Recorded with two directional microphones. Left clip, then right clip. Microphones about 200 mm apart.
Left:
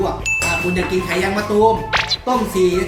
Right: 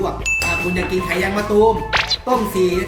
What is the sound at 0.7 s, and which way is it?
Speech, centre (ahead or behind).